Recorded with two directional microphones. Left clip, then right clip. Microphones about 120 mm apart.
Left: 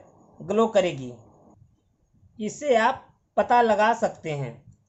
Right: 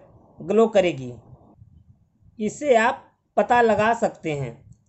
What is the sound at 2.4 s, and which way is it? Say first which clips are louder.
Speech: right 3 dB; 50° right (ahead or behind).